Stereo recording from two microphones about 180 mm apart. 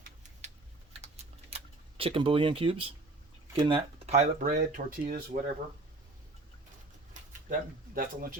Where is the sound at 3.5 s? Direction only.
25° right (ahead or behind).